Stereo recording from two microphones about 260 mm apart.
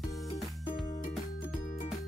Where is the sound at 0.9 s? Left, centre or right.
Left.